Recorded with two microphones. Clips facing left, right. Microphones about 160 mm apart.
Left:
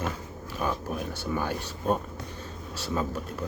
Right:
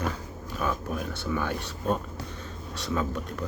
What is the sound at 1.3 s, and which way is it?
Speech, 35° left (ahead or behind).